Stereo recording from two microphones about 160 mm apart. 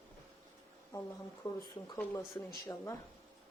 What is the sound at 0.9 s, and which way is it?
Speech, 25° left (ahead or behind).